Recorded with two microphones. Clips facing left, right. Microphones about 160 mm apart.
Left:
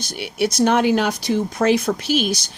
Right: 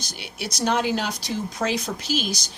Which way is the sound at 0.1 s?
55° left (ahead or behind).